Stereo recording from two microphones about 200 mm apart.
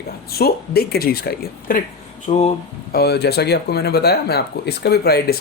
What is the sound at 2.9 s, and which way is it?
Speech, 55° left (ahead or behind).